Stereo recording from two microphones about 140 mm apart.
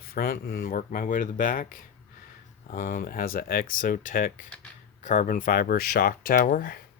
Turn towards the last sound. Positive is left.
turn(degrees=85)